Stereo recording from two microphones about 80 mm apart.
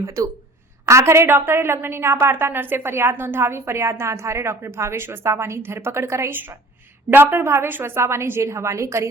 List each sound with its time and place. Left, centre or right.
0.0 s a woman's voice: right